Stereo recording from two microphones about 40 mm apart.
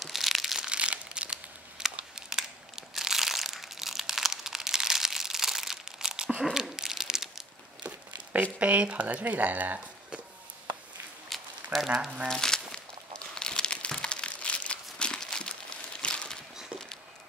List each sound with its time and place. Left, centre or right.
0.0 s crumpling: centre
0.6 s a sound: right
1.3 s crumpling: centre
2.2 s crushing: centre
5.9 s crumpling: centre
6.5 s a sound: centre
7.8 s speech: right
11.2 s a sound: centre
11.9 s speech: centre
12.3 s speech: centre
13.3 s crumpling: centre
16.0 s a sound: left